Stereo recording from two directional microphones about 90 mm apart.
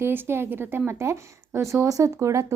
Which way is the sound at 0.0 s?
25° right (ahead or behind).